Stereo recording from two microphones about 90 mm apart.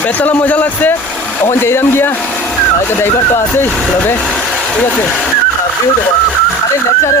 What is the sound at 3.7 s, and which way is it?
Speech, 10° left (ahead or behind).